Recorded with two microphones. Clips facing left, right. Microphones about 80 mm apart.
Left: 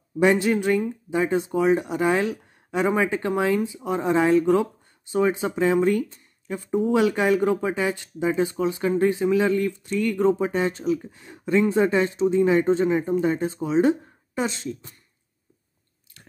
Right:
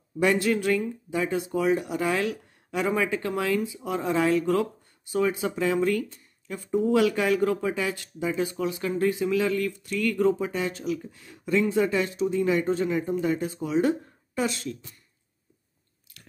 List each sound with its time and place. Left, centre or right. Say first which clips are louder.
0.2 s speech: left 4 dB; left